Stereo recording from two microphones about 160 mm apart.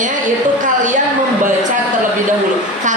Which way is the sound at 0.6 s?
50° right (ahead or behind).